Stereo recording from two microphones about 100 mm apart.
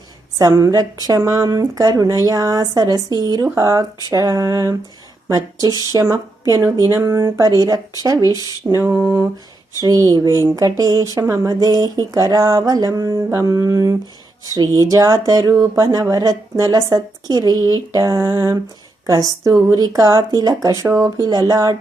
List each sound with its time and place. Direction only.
0.3 s speech: 35° right (ahead or behind)
8.6 s mantra: 25° right (ahead or behind)
9.8 s speech: 40° right (ahead or behind)